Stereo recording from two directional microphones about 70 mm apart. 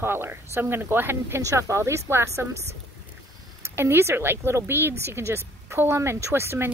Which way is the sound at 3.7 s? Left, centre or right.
Right.